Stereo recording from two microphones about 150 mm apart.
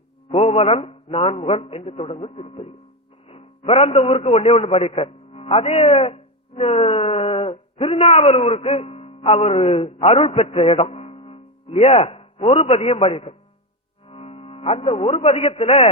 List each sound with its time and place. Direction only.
0.3 s a man's voice: 40° left (ahead or behind)